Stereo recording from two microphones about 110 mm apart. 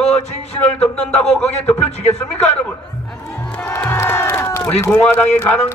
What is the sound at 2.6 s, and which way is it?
Crowd, 10° left (ahead or behind).